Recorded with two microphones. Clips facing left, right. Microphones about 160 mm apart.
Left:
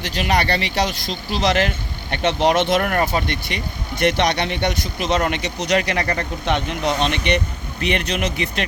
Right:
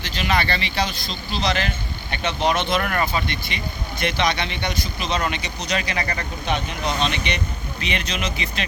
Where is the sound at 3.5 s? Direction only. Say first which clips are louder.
Left 2 dB; 55° left (ahead or behind).